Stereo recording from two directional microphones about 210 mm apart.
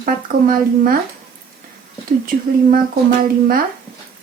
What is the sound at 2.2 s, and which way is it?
Speech, 40° right (ahead or behind).